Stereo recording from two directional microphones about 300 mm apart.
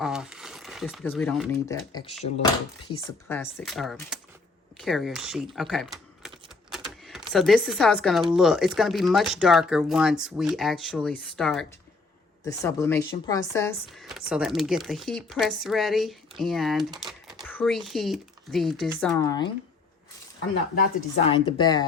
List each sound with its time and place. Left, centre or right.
0.0 s speech: centre
2.2 s speech: centre
3.3 s speech: centre
20.8 s speech: left